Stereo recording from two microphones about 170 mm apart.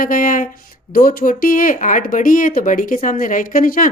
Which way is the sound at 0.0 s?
55° left (ahead or behind).